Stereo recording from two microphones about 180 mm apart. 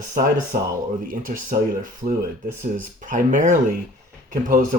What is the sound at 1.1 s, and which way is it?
Speech, 50° right (ahead or behind).